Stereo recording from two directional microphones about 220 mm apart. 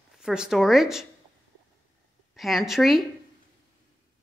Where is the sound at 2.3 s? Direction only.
Centre (ahead or behind).